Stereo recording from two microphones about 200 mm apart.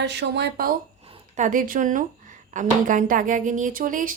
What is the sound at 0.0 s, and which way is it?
A woman's voice, 60° right (ahead or behind).